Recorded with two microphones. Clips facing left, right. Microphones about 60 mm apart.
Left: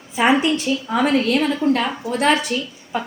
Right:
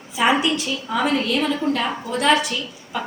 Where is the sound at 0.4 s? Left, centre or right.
Left.